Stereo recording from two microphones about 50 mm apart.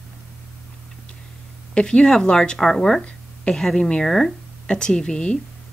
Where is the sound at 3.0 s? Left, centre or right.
Left.